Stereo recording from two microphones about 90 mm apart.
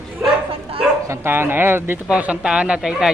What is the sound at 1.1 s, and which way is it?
Speech, 25° right (ahead or behind).